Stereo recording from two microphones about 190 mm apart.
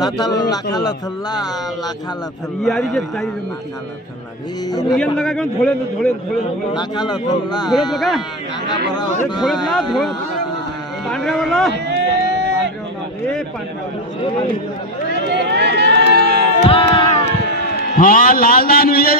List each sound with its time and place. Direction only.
0.0 s a man's voice: 20° left (ahead or behind)
2.6 s a man's voice: centre (ahead or behind)
4.6 s a man's voice: 20° left (ahead or behind)
4.9 s a man's voice: centre (ahead or behind)
6.7 s a man's voice: 20° left (ahead or behind)
7.9 s a man's voice: centre (ahead or behind)
8.9 s a man's voice: 20° left (ahead or behind)
11.1 s a man's voice: centre (ahead or behind)
11.9 s a sound: 65° right (ahead or behind)
15.1 s run: 60° right (ahead or behind)
16.1 s music: 60° right (ahead or behind)
16.6 s a man's voice: 30° left (ahead or behind)
17.9 s a man's voice: 45° left (ahead or behind)